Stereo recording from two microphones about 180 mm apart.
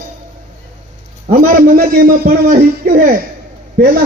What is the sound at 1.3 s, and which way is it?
A man's voice, 50° right (ahead or behind).